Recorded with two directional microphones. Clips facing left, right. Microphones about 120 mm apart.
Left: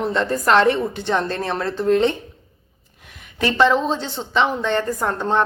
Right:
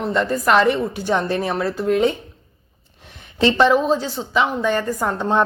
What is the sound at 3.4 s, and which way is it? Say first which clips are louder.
Speech: right 2 dB; 20° right (ahead or behind).